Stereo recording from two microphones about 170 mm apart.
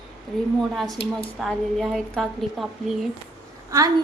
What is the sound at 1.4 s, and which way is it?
A woman's voice, centre (ahead or behind).